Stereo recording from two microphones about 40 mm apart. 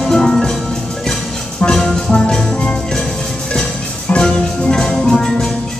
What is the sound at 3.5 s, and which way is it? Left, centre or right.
Music, left.